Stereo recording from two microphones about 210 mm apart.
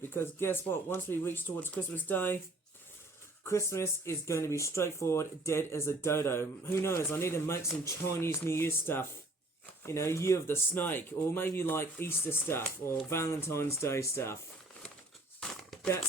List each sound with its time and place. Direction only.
0.1 s speech: 10° left (ahead or behind)
3.4 s speech: 15° left (ahead or behind)
15.4 s crumpling: 5° left (ahead or behind)